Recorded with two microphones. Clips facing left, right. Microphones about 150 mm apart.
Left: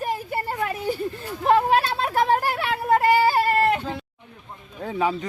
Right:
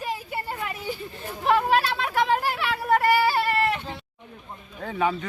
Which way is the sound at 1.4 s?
35° left (ahead or behind).